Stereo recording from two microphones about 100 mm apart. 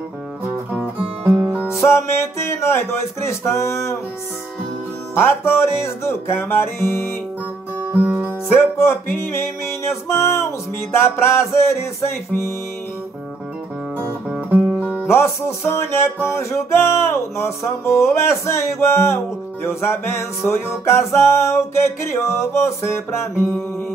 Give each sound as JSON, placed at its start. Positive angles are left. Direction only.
{"t": 0.5, "sound": "music", "side_deg": -20}
{"t": 2.0, "sound": "music", "side_deg": 25}
{"t": 5.1, "sound": "music", "side_deg": 25}
{"t": 7.9, "sound": "music", "side_deg": -20}
{"t": 8.5, "sound": "music", "side_deg": 25}
{"t": 14.3, "sound": "music", "side_deg": -15}
{"t": 15.0, "sound": "music", "side_deg": 25}